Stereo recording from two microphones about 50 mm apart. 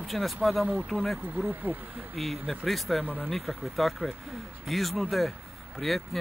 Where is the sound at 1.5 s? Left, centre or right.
Right.